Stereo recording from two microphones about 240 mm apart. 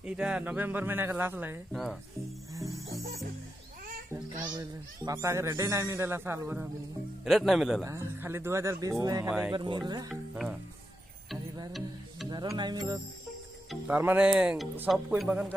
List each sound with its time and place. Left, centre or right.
0.0 s speech: centre
2.5 s music: centre
4.6 s speech: centre
7.8 s speech: centre
12.3 s speech: centre